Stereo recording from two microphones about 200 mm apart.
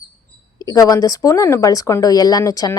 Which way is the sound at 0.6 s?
20° left (ahead or behind).